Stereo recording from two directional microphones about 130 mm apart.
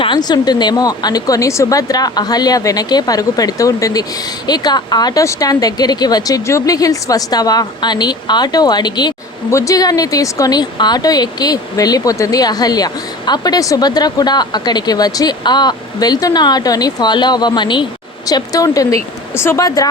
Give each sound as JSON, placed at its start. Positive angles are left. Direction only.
{"t": 0.0, "sound": "speech", "side_deg": 35}